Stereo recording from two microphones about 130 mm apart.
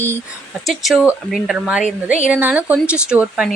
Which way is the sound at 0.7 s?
Centre (ahead or behind).